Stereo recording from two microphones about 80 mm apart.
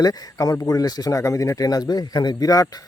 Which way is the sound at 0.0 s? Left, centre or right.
Left.